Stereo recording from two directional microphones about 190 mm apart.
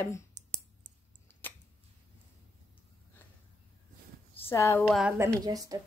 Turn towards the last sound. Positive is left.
turn(degrees=-20)  # may be behind; listen again after turning